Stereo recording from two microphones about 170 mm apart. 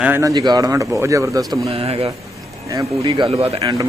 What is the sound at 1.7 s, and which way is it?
Speech, 35° right (ahead or behind).